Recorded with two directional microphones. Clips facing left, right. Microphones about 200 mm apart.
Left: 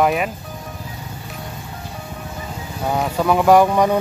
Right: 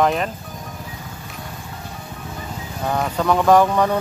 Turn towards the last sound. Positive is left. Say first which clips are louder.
# left 2 dB
turn(degrees=10)  # may be behind; listen again after turning